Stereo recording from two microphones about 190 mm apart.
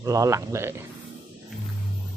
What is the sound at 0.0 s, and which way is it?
Speech, 15° right (ahead or behind).